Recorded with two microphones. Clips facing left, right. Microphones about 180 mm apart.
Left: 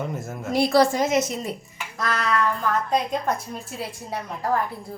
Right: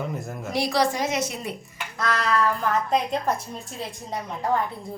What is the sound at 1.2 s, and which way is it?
A woman's voice, centre (ahead or behind).